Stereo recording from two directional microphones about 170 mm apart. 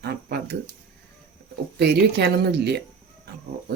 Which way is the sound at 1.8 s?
75° right (ahead or behind).